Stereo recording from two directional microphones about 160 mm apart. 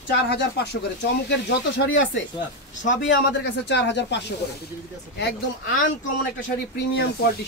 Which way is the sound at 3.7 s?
90° left.